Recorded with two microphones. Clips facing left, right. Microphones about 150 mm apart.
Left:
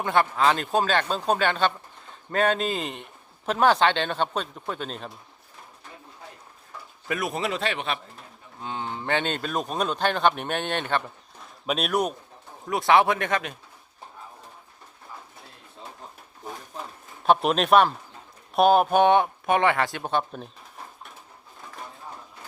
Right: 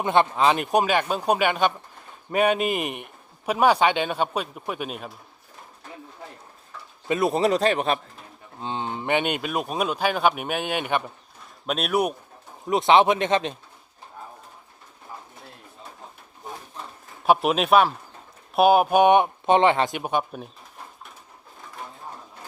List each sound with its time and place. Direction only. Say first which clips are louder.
0.0 s speech: right 2 dB; 20° right (ahead or behind)
7.1 s a man's voice: right 7 dB; 30° right (ahead or behind)
8.6 s speech: right 3 dB; 20° right (ahead or behind)
11.6 s speech: right 1 dB; centre (ahead or behind)
12.6 s speech: right 3 dB; 20° right (ahead or behind)
17.2 s speech: right 1 dB; 5° right (ahead or behind)